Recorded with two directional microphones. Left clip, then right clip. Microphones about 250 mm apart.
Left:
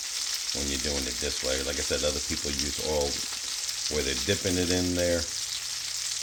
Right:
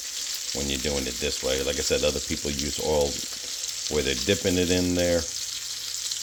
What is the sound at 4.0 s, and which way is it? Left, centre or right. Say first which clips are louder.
Frying: right 5 dB; right.